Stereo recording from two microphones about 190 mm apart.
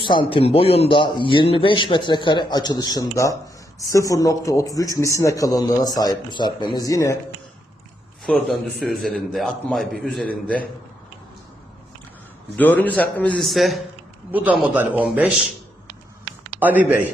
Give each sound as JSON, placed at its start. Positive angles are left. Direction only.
{"t": 0.0, "sound": "a man's voice", "side_deg": 25}
{"t": 8.2, "sound": "a man's voice", "side_deg": 0}
{"t": 12.5, "sound": "a man's voice", "side_deg": 10}
{"t": 16.5, "sound": "speech", "side_deg": -10}